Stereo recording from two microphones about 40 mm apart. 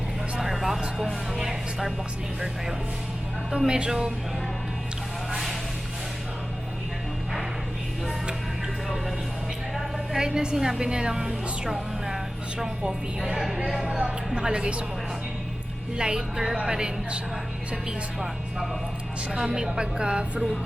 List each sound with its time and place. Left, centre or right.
0.3 s a sound: centre
0.9 s speech: centre
3.7 s a woman's voice: right
9.7 s a woman's voice: centre
13.7 s a woman's voice: right
16.0 s a woman's voice: right
19.3 s a woman's voice: centre